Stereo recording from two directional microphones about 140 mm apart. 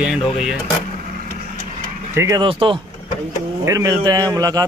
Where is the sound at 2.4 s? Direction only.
40° right (ahead or behind).